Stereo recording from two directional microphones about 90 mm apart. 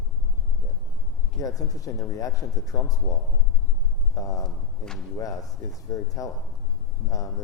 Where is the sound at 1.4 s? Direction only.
40° left (ahead or behind).